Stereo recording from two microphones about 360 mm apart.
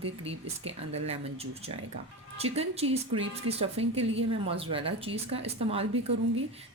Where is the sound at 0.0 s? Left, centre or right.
Centre.